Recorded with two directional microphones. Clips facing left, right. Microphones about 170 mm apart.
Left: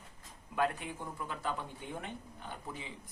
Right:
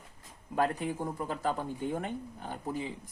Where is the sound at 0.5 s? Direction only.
40° right (ahead or behind).